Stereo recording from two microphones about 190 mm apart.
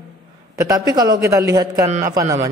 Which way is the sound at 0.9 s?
20° right (ahead or behind).